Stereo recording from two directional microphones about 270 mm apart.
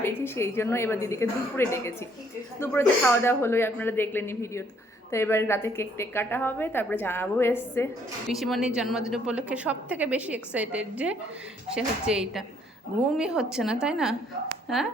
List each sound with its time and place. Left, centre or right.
0.0 s a woman's voice: centre